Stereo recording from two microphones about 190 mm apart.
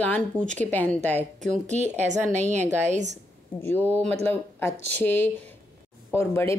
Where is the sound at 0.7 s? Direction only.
10° left (ahead or behind).